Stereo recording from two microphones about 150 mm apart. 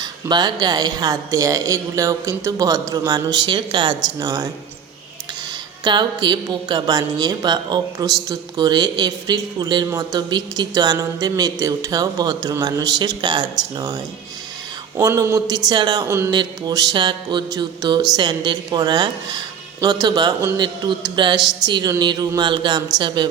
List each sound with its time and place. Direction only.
0.0 s speech: 30° right (ahead or behind)
5.8 s a woman's voice: 30° right (ahead or behind)